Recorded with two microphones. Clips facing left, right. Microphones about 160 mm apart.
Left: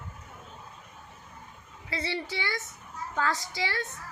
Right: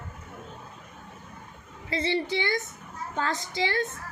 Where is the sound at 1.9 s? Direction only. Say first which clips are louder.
Right 6 dB; 25° right (ahead or behind).